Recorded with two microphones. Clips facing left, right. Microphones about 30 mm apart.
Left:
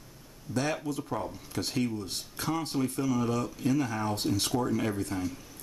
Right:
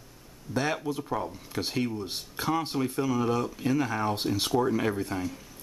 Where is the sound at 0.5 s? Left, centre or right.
Centre.